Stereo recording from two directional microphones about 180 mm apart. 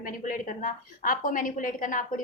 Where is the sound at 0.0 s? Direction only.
50° left (ahead or behind).